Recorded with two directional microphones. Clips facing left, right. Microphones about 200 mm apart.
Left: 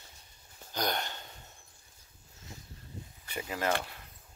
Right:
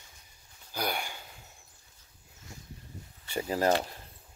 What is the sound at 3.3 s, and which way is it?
Speech, 35° right (ahead or behind).